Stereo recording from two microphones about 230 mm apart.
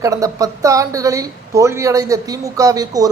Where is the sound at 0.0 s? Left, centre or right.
Centre.